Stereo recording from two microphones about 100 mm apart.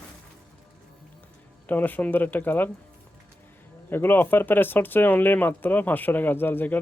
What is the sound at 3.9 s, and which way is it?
Speech, 20° left (ahead or behind).